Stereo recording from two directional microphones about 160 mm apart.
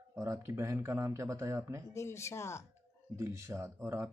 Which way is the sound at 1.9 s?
15° left (ahead or behind).